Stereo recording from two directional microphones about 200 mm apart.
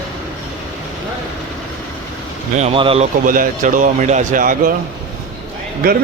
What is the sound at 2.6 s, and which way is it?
Speech, 30° right (ahead or behind).